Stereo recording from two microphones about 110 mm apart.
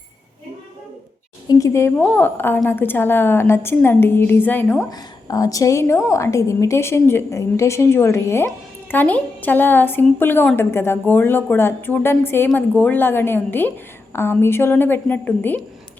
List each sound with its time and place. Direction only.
1.5 s a woman's voice: 30° left (ahead or behind)
4.9 s a woman's voice: 35° left (ahead or behind); by 15.6 s 15° left (ahead or behind)